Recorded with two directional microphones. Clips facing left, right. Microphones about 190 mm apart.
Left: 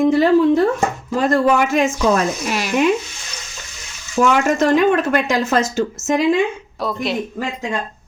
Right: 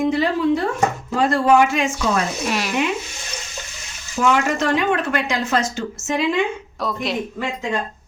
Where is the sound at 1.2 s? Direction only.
45° left (ahead or behind).